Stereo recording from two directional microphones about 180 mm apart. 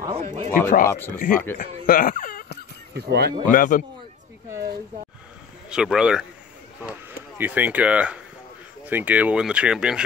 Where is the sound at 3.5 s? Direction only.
50° left (ahead or behind).